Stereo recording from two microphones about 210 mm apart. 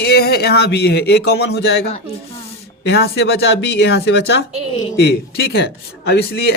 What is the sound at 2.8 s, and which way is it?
A woman's voice, 50° left (ahead or behind).